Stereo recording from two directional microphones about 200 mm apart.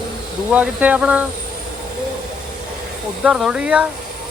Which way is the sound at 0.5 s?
5° right (ahead or behind).